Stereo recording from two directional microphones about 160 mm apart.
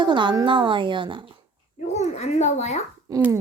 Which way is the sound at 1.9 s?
45° left (ahead or behind).